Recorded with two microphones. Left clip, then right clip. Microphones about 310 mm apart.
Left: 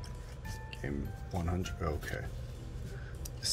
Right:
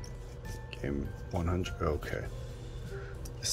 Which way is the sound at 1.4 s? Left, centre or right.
Centre.